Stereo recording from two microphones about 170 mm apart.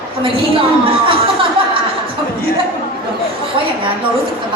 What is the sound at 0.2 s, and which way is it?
A woman's voice, 30° right (ahead or behind).